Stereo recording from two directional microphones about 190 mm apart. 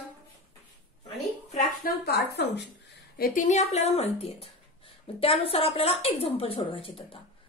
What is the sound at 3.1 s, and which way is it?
A woman's voice, 45° left (ahead or behind).